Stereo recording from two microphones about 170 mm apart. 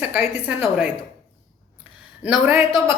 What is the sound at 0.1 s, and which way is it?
Speech, 10° right (ahead or behind).